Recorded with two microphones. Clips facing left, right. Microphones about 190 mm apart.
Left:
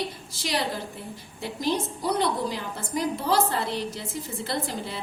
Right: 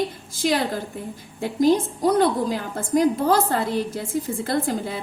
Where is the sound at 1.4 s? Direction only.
50° right (ahead or behind).